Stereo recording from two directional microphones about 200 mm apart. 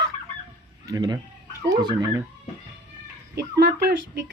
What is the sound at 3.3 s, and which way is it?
Speech, 55° right (ahead or behind).